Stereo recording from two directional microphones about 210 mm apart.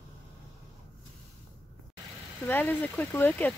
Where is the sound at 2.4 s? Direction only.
10° left (ahead or behind).